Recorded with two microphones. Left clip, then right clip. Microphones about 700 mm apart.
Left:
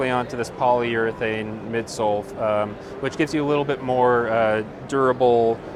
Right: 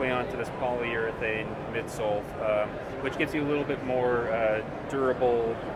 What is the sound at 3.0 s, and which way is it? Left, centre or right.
Speech, left.